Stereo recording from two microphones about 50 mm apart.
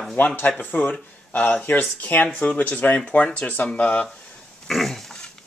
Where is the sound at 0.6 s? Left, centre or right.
Left.